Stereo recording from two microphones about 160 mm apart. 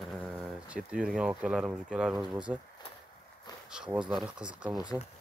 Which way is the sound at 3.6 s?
5° right (ahead or behind).